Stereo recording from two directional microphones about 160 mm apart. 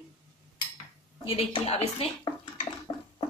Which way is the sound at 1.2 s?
35° left (ahead or behind).